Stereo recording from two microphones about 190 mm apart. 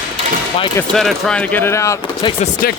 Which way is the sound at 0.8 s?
Centre (ahead or behind).